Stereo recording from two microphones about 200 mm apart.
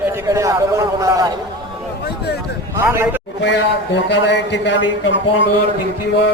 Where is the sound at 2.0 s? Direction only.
55° left (ahead or behind).